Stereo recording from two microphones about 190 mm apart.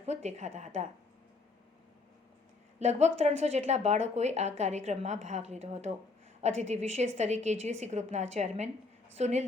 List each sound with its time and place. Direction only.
0.0 s speech: 35° right (ahead or behind)
2.7 s speech: 35° right (ahead or behind)